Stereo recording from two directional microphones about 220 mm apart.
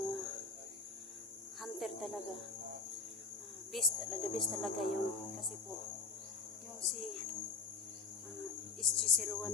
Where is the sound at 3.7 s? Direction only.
Centre (ahead or behind).